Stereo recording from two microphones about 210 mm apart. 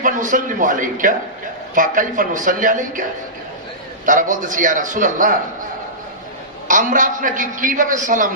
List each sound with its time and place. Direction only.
0.0 s a man's voice: 40° right (ahead or behind)
6.7 s a man's voice: 40° right (ahead or behind)